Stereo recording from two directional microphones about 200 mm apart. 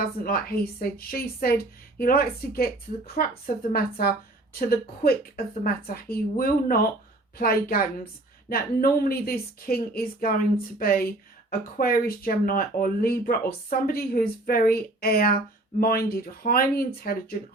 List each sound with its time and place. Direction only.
0.0 s speech: 50° left (ahead or behind)